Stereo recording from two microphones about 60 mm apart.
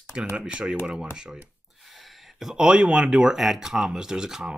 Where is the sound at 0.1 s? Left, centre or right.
Centre.